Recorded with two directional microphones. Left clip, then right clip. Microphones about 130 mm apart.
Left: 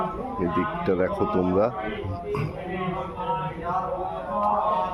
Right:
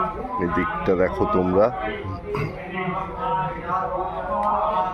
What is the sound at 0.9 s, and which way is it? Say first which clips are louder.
Speech: right 5 dB; 5° right (ahead or behind).